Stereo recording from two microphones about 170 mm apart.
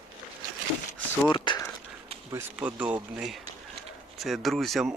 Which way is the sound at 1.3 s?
25° left (ahead or behind).